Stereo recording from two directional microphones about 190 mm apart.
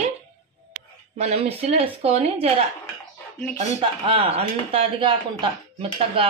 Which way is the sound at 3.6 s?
30° right (ahead or behind).